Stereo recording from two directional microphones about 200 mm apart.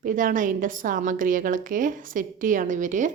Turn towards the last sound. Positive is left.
turn(degrees=-40)  # may be behind; listen again after turning